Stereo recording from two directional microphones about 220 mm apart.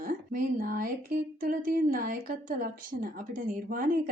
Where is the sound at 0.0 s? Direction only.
40° right (ahead or behind).